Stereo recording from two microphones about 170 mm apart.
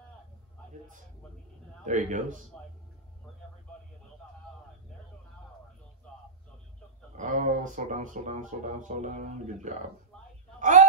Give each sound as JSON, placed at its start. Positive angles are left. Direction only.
{"t": 1.9, "sound": "speech", "side_deg": -45}
{"t": 7.2, "sound": "speech", "side_deg": -45}
{"t": 10.6, "sound": "a sound", "side_deg": -45}